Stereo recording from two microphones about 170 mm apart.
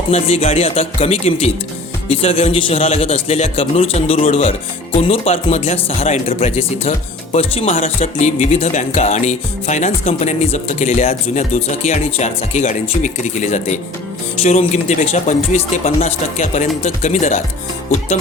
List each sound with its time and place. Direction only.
0.1 s a man's voice: 35° left (ahead or behind)